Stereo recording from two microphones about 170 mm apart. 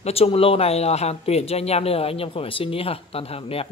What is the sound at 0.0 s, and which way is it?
Speech, 35° left (ahead or behind).